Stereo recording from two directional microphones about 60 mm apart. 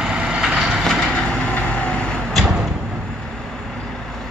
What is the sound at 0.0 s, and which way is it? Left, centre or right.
Vehicle, centre.